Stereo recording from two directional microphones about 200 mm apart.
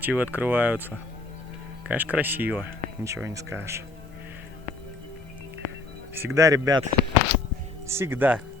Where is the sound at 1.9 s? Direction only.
10° right (ahead or behind).